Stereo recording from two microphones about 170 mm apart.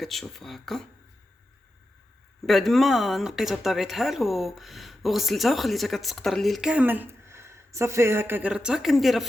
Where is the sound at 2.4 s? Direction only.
Centre (ahead or behind).